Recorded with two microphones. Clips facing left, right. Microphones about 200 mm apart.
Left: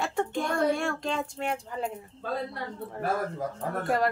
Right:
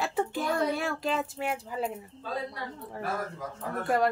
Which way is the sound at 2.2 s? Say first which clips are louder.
Left 2 dB; 55° left (ahead or behind).